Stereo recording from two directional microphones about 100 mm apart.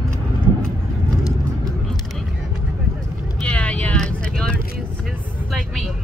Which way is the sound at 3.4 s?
10° left (ahead or behind).